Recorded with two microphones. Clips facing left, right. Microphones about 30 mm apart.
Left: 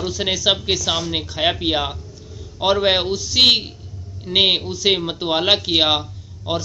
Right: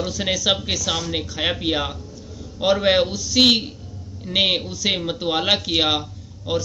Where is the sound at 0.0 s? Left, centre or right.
Centre.